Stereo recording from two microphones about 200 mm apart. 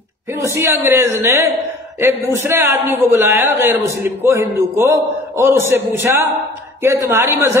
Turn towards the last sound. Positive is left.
turn(degrees=-15)  # may be behind; listen again after turning